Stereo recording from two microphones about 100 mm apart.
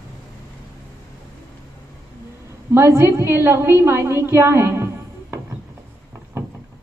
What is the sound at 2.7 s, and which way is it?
A woman's voice, 25° right (ahead or behind).